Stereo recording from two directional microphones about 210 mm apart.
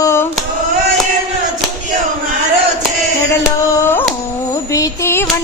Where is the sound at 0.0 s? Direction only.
10° left (ahead or behind).